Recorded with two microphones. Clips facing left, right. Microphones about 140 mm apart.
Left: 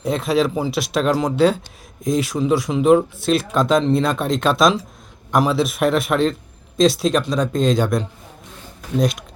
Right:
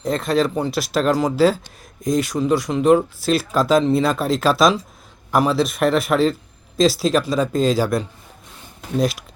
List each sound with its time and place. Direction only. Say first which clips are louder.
0.0 s speech: left 1 dB; centre (ahead or behind)